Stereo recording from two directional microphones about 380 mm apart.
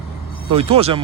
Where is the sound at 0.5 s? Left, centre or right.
Centre.